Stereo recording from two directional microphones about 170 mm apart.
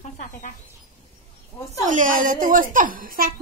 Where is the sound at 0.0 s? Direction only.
50° left (ahead or behind).